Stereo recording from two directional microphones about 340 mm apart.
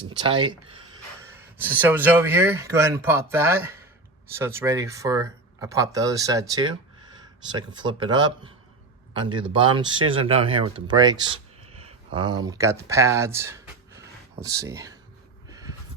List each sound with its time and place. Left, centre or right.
0.1 s speech: centre
1.5 s speech: centre
7.7 s speech: centre